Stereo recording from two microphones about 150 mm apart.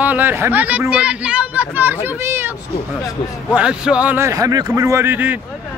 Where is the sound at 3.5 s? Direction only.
5° right (ahead or behind).